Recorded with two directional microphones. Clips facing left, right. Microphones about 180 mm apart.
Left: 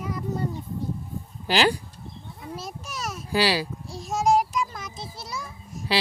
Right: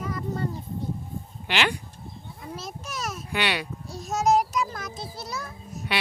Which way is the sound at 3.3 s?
30° left (ahead or behind).